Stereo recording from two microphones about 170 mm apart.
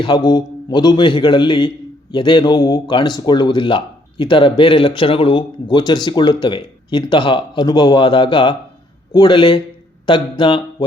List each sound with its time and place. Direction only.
0.0 s speech: 25° left (ahead or behind)